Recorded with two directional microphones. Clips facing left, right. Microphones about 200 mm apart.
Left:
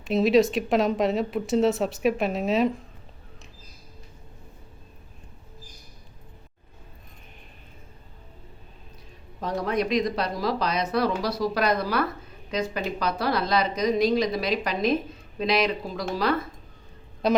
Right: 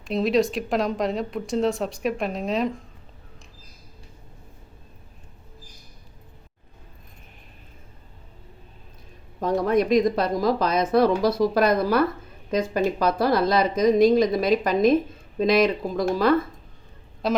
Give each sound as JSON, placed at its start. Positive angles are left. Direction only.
{"t": 0.0, "sound": "speech", "side_deg": 0}
{"t": 9.4, "sound": "speech", "side_deg": -50}
{"t": 17.2, "sound": "speech", "side_deg": 0}